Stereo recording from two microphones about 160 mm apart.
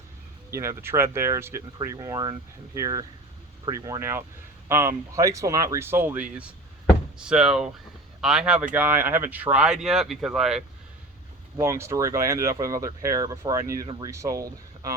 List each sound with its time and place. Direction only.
0.5 s speech: 20° right (ahead or behind); by 10.6 s 5° right (ahead or behind)
11.6 s speech: 15° right (ahead or behind)